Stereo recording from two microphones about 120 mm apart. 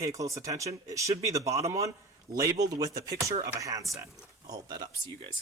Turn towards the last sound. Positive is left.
turn(degrees=-40)  # may be behind; listen again after turning